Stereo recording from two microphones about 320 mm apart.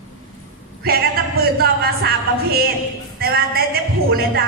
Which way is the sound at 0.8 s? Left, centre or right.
Right.